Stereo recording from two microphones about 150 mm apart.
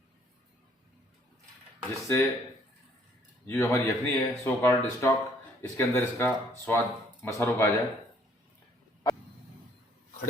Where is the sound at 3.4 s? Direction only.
20° left (ahead or behind).